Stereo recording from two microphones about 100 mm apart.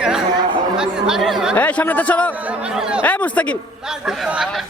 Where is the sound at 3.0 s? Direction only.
15° left (ahead or behind).